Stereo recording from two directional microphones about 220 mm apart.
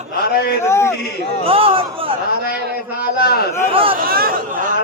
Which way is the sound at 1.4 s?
25° right (ahead or behind).